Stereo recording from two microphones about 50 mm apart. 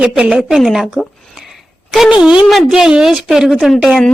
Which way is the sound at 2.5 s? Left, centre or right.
Centre.